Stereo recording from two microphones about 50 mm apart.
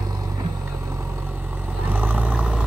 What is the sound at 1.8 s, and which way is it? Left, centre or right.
Vehicle, right.